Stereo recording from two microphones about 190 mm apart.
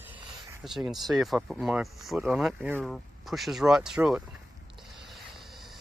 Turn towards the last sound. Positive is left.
turn(degrees=0)  # may be behind; listen again after turning